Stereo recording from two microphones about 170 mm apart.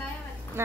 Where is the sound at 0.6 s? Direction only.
15° right (ahead or behind).